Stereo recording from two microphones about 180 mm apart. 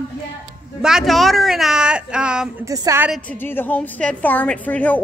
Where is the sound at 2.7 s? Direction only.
15° right (ahead or behind).